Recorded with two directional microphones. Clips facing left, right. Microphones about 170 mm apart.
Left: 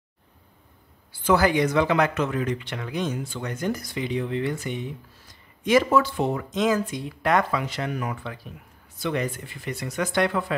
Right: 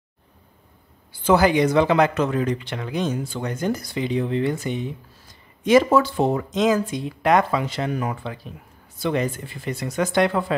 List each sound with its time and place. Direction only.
1.2 s speech: 20° right (ahead or behind)